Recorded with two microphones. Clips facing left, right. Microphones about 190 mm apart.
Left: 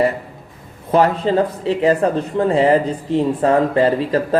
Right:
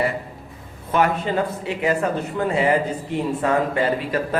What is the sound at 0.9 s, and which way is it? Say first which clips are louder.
Speech: left 5 dB; 30° left (ahead or behind).